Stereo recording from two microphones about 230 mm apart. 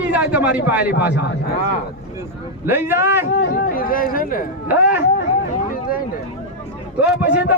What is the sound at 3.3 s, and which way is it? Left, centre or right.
Speech, left.